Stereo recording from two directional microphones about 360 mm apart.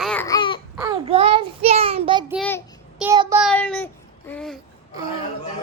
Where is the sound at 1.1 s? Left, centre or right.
Centre.